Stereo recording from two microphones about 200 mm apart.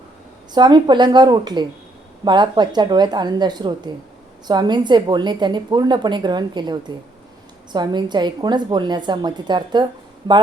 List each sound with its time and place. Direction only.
0.5 s a woman's voice: 20° right (ahead or behind)